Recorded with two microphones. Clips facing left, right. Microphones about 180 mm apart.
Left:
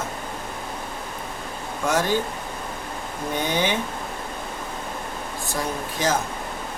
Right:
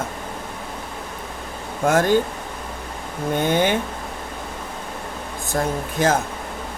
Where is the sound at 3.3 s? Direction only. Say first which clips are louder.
Right 5 dB; 50° right (ahead or behind).